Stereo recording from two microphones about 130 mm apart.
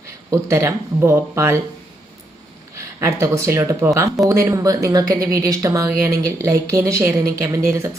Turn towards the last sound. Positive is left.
turn(degrees=-20)  # may be behind; listen again after turning